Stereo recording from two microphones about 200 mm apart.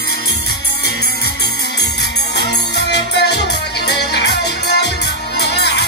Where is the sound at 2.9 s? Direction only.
60° left (ahead or behind).